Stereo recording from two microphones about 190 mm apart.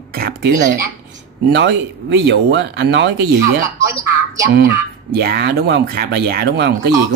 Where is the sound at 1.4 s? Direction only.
65° right (ahead or behind).